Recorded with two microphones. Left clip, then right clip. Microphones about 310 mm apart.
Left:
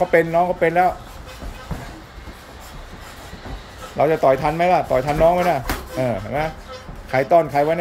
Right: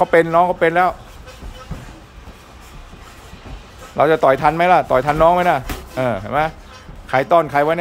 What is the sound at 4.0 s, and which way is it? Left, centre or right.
Speech, centre.